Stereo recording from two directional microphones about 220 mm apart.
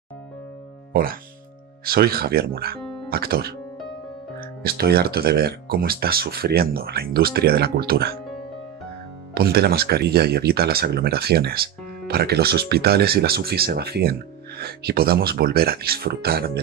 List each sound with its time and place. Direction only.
1.9 s speech: 45° right (ahead or behind)
9.3 s speech: 45° right (ahead or behind)